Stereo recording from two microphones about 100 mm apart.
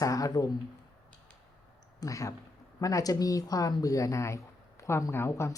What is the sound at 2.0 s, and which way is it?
Speech, 35° left (ahead or behind).